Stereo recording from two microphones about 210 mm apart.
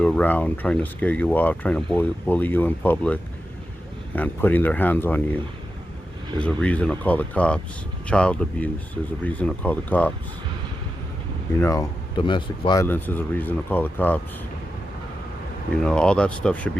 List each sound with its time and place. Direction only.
0.0 s speech: 5° left (ahead or behind)
6.4 s speech: 5° left (ahead or behind)
11.6 s speech: 15° left (ahead or behind)
15.7 s speech: 5° left (ahead or behind)